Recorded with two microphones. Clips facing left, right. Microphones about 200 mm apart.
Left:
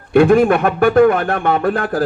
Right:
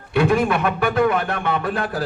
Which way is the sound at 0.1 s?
50° left (ahead or behind).